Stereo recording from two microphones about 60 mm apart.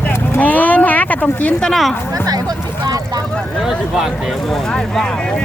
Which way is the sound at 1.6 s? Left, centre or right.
Centre.